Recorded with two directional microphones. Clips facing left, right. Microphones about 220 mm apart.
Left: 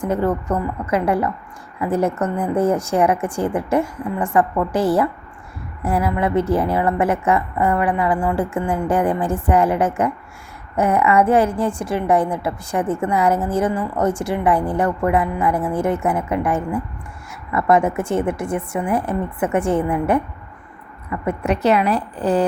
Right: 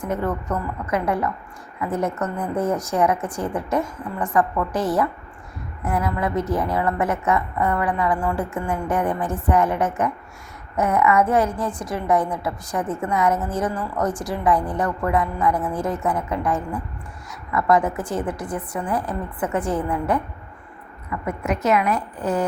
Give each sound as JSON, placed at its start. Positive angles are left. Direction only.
{"t": 0.1, "sound": "a woman's voice", "side_deg": 30}